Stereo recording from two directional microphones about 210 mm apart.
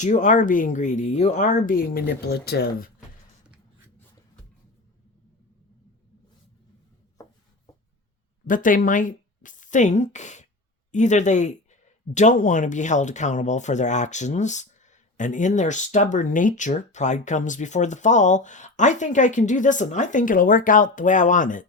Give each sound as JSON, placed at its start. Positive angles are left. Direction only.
{"t": 0.0, "sound": "speech", "side_deg": 35}
{"t": 8.4, "sound": "speech", "side_deg": 40}